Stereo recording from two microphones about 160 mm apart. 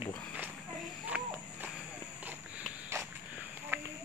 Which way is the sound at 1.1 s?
10° right (ahead or behind).